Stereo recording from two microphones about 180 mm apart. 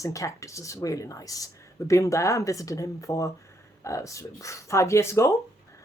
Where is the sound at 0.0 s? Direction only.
15° left (ahead or behind).